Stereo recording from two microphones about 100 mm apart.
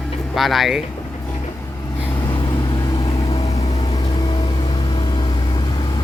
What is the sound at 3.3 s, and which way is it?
Vehicle, 80° left.